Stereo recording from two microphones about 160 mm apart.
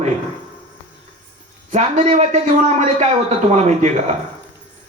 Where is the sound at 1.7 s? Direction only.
45° right (ahead or behind).